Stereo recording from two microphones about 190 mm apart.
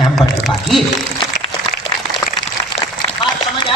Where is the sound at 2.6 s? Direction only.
20° left (ahead or behind).